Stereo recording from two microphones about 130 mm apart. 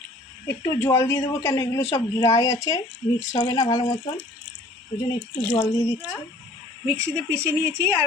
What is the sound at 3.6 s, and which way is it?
Speech, 25° left (ahead or behind).